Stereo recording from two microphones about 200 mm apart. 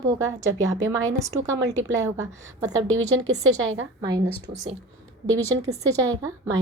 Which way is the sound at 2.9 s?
90° right.